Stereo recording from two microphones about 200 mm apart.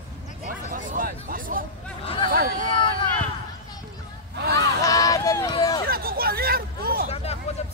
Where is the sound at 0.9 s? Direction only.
45° right (ahead or behind).